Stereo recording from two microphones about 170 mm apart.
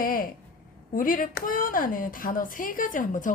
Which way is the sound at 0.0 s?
55° left (ahead or behind).